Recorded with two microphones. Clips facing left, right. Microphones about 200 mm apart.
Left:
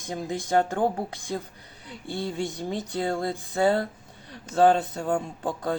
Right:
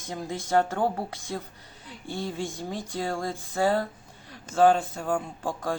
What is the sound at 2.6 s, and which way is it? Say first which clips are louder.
Speech: left 3 dB; 20° left (ahead or behind).